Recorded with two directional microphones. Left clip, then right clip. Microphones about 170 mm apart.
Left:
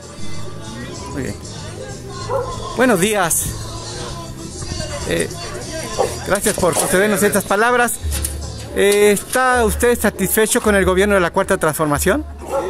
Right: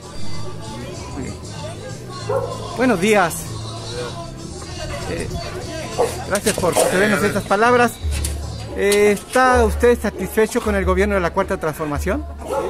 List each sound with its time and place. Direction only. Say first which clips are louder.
2.8 s speech: left 1 dB; 35° left (ahead or behind)
6.2 s speech: left 2 dB; 35° left (ahead or behind)